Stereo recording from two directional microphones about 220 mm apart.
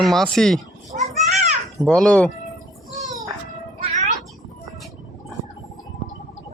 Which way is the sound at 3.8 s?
30° right (ahead or behind).